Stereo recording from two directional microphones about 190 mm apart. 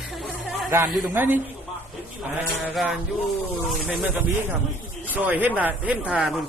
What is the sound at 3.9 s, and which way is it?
A woman's voice, 5° right (ahead or behind).